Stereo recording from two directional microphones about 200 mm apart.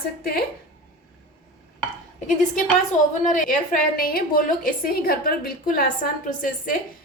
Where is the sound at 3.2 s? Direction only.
40° left (ahead or behind).